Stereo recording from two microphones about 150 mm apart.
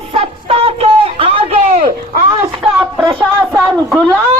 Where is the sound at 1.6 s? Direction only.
50° right (ahead or behind).